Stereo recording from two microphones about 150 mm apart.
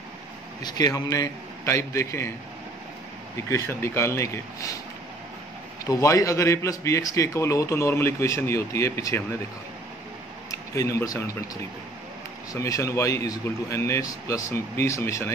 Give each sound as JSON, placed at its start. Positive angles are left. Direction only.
{"t": 0.6, "sound": "a man's voice", "side_deg": 25}
{"t": 3.4, "sound": "a man's voice", "side_deg": 20}
{"t": 5.9, "sound": "a man's voice", "side_deg": 20}
{"t": 10.5, "sound": "speech", "side_deg": 20}
{"t": 12.5, "sound": "a man's voice", "side_deg": 20}